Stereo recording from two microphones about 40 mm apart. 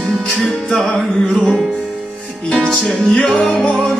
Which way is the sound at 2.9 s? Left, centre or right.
Centre.